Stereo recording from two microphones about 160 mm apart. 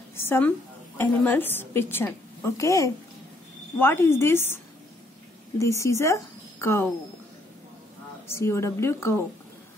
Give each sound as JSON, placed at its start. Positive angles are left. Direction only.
{"t": 0.1, "sound": "a woman's voice", "side_deg": 15}
{"t": 5.6, "sound": "speech", "side_deg": 20}
{"t": 8.3, "sound": "a woman's voice", "side_deg": 15}